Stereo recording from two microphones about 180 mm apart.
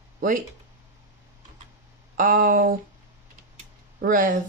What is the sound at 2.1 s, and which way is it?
Speech, 50° right (ahead or behind).